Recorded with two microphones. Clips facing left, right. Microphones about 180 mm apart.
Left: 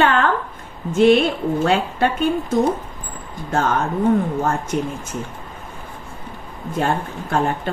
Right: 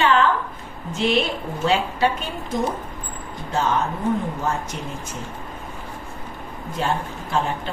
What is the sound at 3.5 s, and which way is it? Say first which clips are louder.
Speech: left 3 dB; 50° left (ahead or behind).